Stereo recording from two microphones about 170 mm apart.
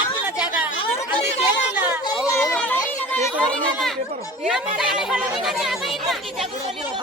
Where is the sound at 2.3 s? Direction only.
20° left (ahead or behind); by 6.4 s centre (ahead or behind).